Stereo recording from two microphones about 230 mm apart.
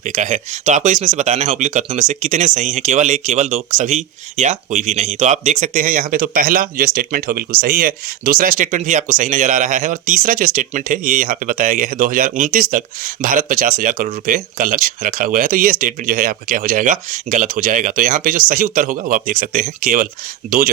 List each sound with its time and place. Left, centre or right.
0.0 s speech: right